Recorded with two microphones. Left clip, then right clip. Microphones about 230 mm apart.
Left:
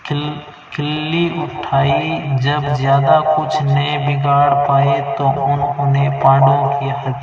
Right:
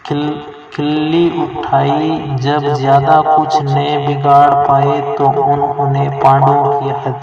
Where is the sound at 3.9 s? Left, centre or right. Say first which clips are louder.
Right 6 dB; right.